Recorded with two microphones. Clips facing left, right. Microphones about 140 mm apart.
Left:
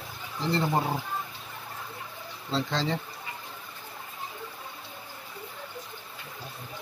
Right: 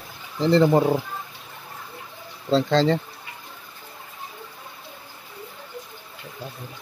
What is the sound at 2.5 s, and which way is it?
Speech, 90° right.